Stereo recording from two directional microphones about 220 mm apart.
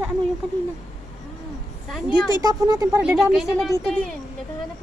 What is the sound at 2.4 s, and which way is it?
Speech, 15° right (ahead or behind).